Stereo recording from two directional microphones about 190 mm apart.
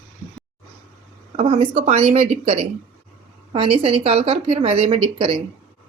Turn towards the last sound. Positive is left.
turn(degrees=-25)  # may be behind; listen again after turning